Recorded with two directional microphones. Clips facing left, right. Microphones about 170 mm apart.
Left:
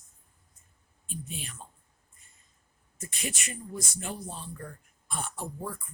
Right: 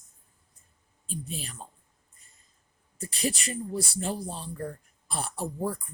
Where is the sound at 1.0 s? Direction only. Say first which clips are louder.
Right 3 dB; 35° right (ahead or behind).